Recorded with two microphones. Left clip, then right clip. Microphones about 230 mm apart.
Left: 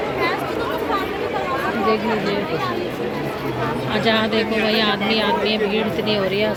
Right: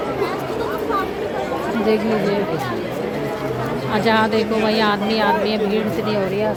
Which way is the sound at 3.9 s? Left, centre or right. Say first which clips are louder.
Right 3 dB; centre.